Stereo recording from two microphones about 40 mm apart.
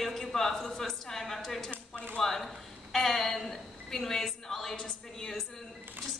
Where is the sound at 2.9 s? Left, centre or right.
Centre.